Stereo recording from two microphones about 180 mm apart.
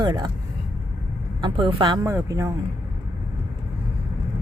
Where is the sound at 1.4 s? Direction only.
25° right (ahead or behind).